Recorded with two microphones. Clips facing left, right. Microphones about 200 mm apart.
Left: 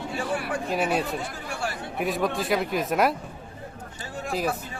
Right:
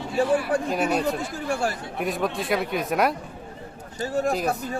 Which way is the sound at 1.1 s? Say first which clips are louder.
Right 6 dB; 40° right (ahead or behind).